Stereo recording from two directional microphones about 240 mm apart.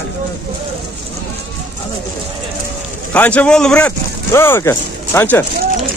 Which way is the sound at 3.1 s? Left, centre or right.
Centre.